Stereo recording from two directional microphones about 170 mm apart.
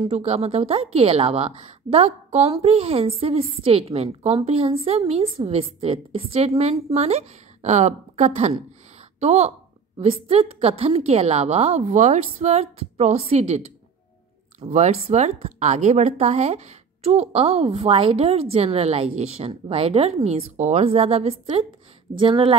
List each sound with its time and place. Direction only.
0.1 s a woman's voice: 40° right (ahead or behind)
14.7 s a woman's voice: 40° right (ahead or behind)